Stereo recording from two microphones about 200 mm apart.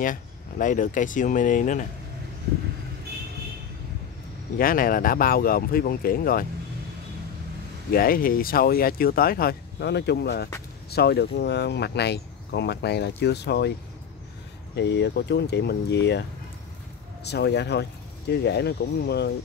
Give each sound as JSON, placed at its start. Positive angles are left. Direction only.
{"t": 0.0, "sound": "speech", "side_deg": 40}
{"t": 4.6, "sound": "speech", "side_deg": 45}
{"t": 7.9, "sound": "speech", "side_deg": 45}
{"t": 14.8, "sound": "speech", "side_deg": 55}